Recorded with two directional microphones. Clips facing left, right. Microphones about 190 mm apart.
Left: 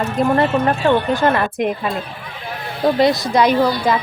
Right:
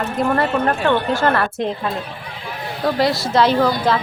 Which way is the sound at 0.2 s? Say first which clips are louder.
Left 2 dB; 20° left (ahead or behind).